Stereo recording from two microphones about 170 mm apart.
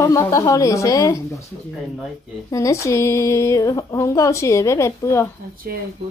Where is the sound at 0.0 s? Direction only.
20° left (ahead or behind).